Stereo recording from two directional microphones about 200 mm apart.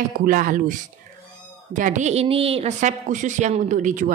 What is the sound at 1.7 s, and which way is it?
A woman's voice, 40° right (ahead or behind).